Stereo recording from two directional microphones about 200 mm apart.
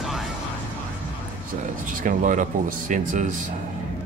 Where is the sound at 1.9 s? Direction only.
40° right (ahead or behind).